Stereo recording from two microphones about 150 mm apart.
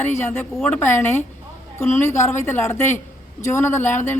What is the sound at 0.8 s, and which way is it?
A man's voice, 15° left (ahead or behind).